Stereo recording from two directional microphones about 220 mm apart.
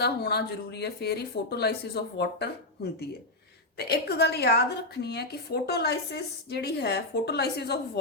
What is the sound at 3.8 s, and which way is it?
A woman's voice, 50° left (ahead or behind).